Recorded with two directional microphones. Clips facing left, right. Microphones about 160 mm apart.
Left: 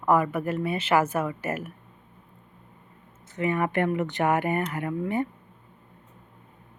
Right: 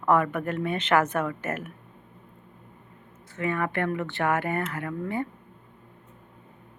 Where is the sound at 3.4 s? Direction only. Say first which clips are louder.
Left 3 dB; 15° left (ahead or behind).